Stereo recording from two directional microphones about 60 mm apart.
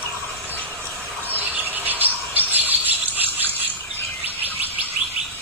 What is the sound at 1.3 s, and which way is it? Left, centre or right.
Squawk, right.